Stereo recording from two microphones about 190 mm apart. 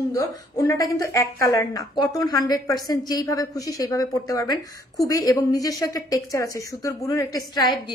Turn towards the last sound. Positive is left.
turn(degrees=20)  # may be behind; listen again after turning